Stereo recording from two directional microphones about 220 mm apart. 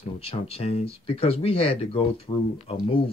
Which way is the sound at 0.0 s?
25° left (ahead or behind).